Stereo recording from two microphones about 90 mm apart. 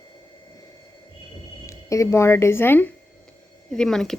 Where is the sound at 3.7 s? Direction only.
5° left (ahead or behind).